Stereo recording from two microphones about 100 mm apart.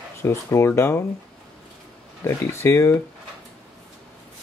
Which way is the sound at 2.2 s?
25° left (ahead or behind).